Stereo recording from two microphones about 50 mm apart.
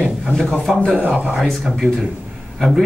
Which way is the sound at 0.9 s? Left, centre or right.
Right.